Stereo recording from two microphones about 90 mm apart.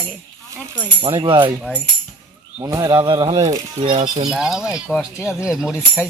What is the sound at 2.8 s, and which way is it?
Speech, 50° right (ahead or behind).